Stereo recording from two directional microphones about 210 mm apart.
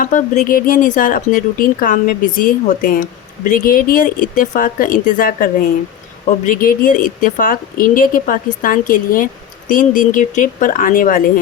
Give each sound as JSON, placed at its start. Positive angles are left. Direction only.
{"t": 0.0, "sound": "a woman's voice", "side_deg": 40}